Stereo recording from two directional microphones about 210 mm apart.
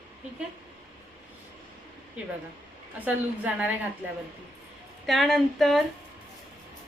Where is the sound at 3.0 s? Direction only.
5° right (ahead or behind).